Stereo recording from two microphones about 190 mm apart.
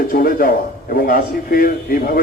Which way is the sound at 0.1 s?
50° left (ahead or behind).